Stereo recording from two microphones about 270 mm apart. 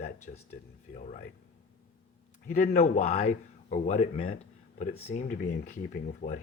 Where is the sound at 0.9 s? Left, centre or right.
Left.